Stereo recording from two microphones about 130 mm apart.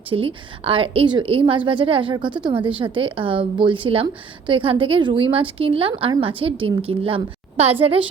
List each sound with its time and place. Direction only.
0.1 s a woman's voice: 45° right (ahead or behind)